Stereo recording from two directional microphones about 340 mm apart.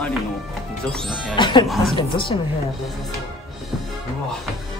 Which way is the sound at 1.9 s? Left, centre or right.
Centre.